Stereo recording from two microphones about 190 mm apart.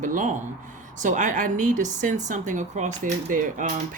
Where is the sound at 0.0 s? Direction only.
40° right (ahead or behind).